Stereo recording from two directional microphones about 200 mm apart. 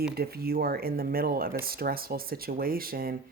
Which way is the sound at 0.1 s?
50° right (ahead or behind).